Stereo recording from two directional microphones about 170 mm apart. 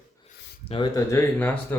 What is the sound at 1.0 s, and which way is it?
Speech, 15° left (ahead or behind).